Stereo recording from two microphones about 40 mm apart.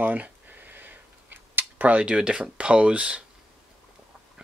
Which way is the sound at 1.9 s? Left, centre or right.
Right.